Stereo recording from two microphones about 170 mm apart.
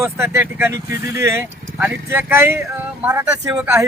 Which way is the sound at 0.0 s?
15° right (ahead or behind).